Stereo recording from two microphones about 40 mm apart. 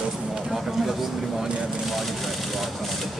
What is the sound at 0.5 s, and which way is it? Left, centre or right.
Speech, centre.